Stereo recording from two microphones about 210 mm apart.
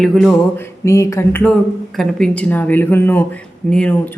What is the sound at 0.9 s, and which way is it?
Speech, 15° left (ahead or behind).